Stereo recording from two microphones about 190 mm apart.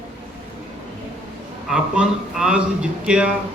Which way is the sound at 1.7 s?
5° right (ahead or behind).